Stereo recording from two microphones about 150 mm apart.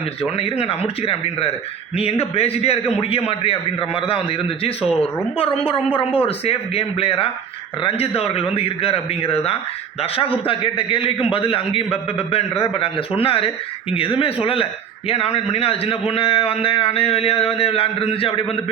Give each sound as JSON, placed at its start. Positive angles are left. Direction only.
{"t": 0.2, "sound": "a man's voice", "side_deg": 40}